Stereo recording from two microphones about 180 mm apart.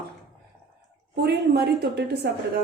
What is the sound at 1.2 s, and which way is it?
A woman's voice, 65° right (ahead or behind).